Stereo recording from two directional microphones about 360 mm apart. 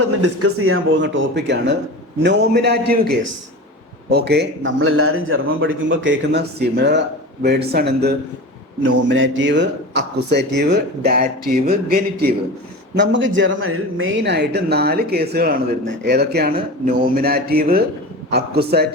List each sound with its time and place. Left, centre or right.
0.0 s speech: right